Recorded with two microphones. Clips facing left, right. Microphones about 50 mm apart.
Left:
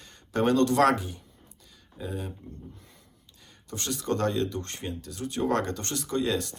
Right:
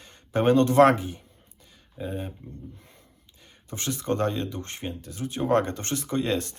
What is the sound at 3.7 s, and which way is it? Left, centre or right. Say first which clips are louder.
Speech: right 2 dB; right.